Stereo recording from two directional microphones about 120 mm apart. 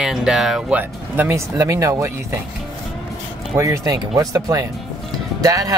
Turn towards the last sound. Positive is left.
turn(degrees=-30)  # may be behind; listen again after turning